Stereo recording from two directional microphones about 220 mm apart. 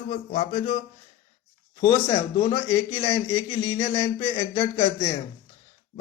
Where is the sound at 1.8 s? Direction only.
15° left (ahead or behind).